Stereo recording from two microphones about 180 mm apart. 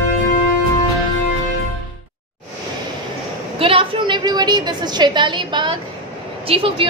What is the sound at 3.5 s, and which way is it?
A woman's voice, 30° right (ahead or behind).